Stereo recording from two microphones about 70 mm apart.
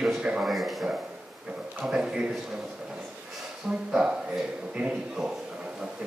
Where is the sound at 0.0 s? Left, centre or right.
Centre.